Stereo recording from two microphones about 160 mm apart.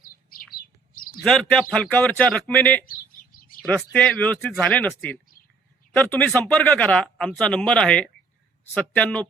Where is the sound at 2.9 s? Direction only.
60° left (ahead or behind).